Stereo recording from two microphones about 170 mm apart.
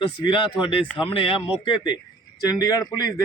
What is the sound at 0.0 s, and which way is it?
A man's voice, 30° left (ahead or behind).